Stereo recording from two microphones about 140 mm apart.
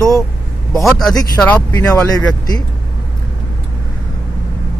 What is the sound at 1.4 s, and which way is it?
Speech, 15° left (ahead or behind).